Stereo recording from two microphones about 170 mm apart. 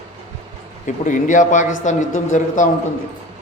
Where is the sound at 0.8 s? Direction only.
50° left (ahead or behind).